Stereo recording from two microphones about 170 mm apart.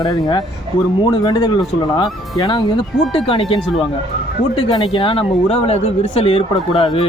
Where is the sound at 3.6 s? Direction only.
Centre (ahead or behind).